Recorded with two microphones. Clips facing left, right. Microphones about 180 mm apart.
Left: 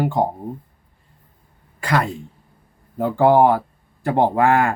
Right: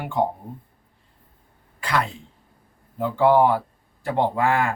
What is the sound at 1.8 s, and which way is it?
Speech, 45° left (ahead or behind).